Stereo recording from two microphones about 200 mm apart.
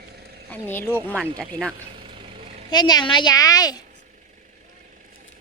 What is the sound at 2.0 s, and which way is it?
Vehicle, 25° right (ahead or behind).